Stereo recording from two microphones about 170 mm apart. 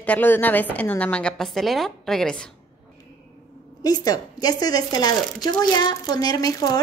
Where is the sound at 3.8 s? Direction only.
25° left (ahead or behind).